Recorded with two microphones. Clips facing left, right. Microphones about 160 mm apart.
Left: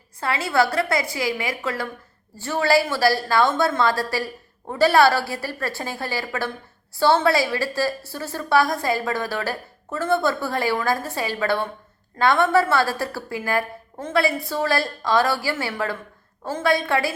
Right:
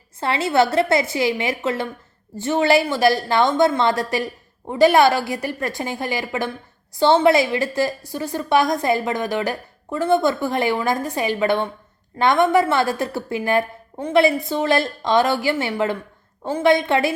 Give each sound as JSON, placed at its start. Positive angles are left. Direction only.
{"t": 0.2, "sound": "a woman's voice", "side_deg": -25}